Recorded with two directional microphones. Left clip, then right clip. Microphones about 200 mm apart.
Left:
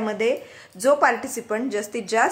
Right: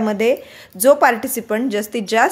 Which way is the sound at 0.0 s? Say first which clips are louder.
Right 6 dB; 40° right (ahead or behind).